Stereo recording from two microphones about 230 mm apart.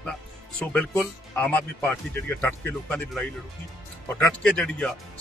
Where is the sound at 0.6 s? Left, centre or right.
Centre.